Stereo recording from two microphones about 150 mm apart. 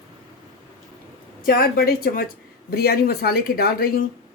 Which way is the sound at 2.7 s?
90° left.